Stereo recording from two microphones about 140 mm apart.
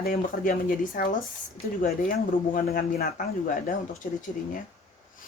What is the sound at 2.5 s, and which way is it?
Speech, 90° left.